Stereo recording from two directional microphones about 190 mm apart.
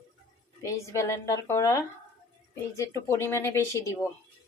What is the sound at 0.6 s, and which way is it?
A woman's voice, 15° left (ahead or behind).